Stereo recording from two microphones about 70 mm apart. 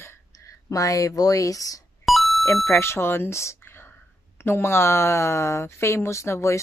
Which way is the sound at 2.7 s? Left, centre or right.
Left.